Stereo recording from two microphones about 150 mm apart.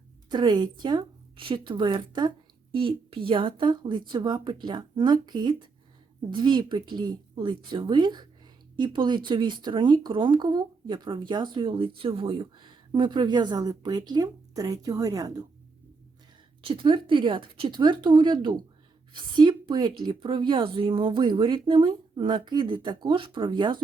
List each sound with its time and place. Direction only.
0.3 s speech: 30° right (ahead or behind)
16.6 s speech: 35° right (ahead or behind)